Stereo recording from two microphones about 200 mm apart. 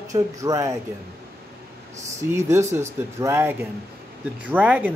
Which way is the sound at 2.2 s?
15° right (ahead or behind).